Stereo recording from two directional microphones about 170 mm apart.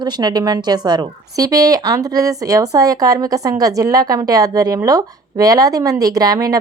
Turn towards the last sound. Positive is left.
turn(degrees=-20)  # may be behind; listen again after turning